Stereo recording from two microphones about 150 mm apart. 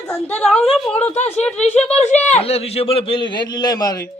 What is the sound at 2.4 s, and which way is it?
A man's voice, 40° left (ahead or behind).